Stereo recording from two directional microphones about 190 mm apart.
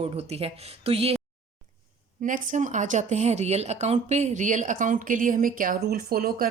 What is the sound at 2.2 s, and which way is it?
A woman's voice, 45° right (ahead or behind).